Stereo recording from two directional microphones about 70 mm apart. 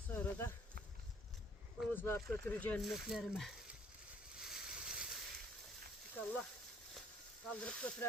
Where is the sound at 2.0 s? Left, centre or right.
Left.